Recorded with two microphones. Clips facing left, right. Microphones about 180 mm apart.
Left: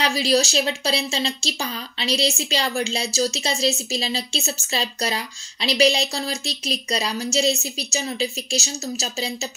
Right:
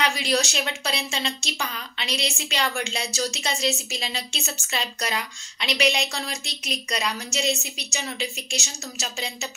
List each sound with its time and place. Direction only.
0.0 s a woman's voice: 30° left (ahead or behind)